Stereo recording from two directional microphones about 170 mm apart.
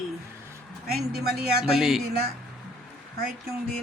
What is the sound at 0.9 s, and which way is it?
Speech, 65° right (ahead or behind).